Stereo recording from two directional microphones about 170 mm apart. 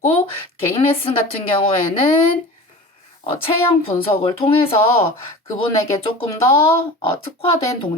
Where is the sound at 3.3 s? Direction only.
30° left (ahead or behind).